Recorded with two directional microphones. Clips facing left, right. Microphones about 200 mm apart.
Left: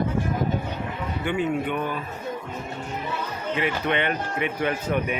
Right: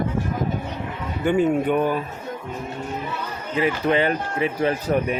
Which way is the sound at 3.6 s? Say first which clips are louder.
Right 6 dB; 35° right (ahead or behind).